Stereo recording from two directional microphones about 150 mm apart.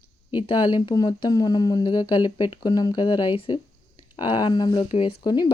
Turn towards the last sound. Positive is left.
turn(degrees=30)  # may be behind; listen again after turning